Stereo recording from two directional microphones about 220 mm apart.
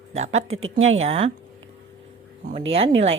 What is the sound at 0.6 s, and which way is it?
Speech, 65° right (ahead or behind).